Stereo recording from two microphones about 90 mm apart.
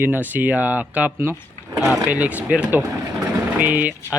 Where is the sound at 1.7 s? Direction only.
Centre (ahead or behind).